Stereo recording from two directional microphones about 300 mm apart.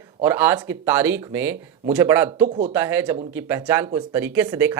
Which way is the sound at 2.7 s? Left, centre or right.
Centre.